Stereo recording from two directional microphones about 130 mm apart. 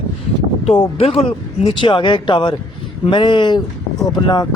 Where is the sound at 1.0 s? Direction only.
50° left (ahead or behind).